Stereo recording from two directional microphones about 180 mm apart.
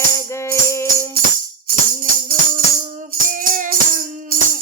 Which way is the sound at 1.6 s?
55° right (ahead or behind).